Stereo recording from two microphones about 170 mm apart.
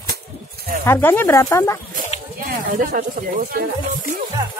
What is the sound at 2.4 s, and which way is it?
Speech, 55° right (ahead or behind).